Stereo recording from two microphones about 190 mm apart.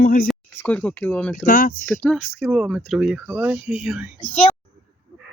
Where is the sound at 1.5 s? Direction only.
45° left (ahead or behind).